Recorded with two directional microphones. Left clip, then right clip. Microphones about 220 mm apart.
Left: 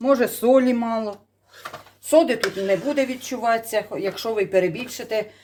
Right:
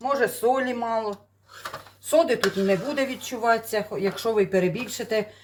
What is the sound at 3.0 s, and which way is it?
Speech, 30° left (ahead or behind).